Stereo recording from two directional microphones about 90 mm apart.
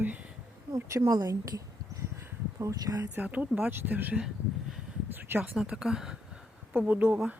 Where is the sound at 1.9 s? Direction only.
30° right (ahead or behind).